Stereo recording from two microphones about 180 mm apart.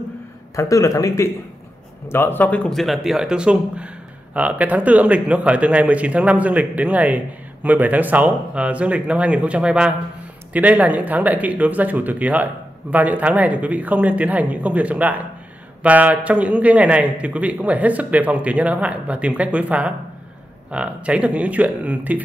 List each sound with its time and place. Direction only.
0.6 s speech: 15° left (ahead or behind); by 22.2 s 10° right (ahead or behind)